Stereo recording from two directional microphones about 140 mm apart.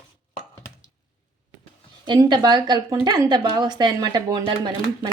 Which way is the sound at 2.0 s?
30° right (ahead or behind).